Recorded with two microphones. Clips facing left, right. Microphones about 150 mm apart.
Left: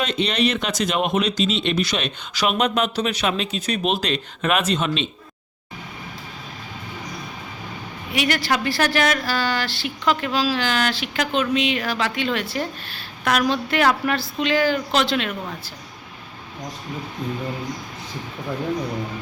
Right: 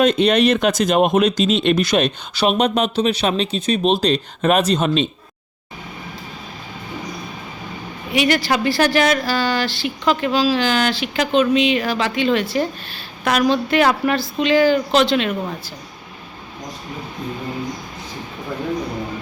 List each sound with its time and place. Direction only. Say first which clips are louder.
0.0 s speech: right 7 dB; 50° right (ahead or behind)
2.3 s speech: right 3 dB; 30° right (ahead or behind)
8.1 s speech: right 4 dB; centre (ahead or behind)